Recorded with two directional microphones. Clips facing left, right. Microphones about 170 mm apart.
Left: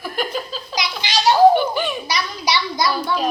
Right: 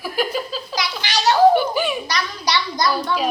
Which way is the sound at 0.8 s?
15° left (ahead or behind).